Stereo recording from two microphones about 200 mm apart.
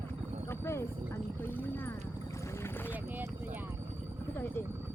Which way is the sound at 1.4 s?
10° left (ahead or behind).